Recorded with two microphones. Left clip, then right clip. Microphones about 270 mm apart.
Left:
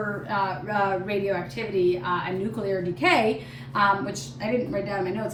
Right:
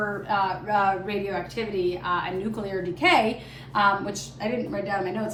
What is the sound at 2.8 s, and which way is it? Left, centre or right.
A woman's voice, centre.